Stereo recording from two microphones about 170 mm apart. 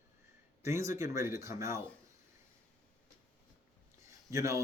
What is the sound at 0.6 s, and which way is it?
Speech, 15° right (ahead or behind).